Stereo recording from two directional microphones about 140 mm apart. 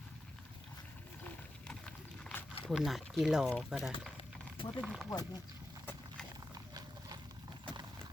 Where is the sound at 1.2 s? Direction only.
5° left (ahead or behind).